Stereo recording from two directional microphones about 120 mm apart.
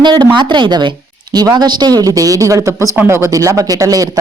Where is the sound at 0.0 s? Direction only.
40° right (ahead or behind).